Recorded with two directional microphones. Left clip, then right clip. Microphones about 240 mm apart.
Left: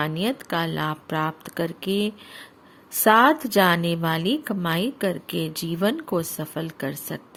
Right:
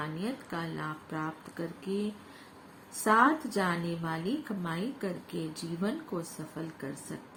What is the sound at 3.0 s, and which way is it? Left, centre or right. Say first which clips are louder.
A woman's voice: left 8 dB; left.